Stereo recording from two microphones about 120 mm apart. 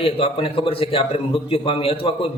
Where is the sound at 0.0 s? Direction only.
50° left (ahead or behind).